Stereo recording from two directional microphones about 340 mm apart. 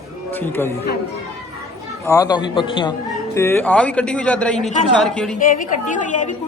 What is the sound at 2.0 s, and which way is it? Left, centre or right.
Speech, centre.